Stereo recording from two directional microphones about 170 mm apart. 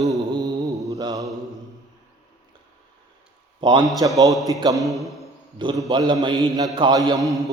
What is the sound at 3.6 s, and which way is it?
Mantra, 25° right (ahead or behind).